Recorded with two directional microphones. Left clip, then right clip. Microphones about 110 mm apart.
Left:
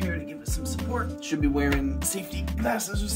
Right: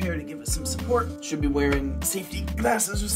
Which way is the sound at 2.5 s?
40° right (ahead or behind).